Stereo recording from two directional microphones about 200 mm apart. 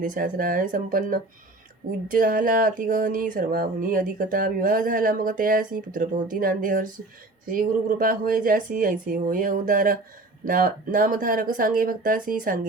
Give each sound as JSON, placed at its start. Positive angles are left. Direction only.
{"t": 0.0, "sound": "speech", "side_deg": -45}